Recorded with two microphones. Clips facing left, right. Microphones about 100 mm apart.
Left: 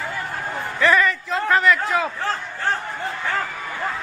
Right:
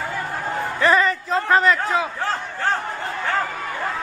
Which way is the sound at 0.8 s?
30° right (ahead or behind).